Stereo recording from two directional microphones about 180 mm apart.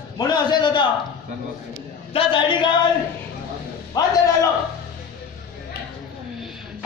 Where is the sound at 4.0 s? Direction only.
20° left (ahead or behind).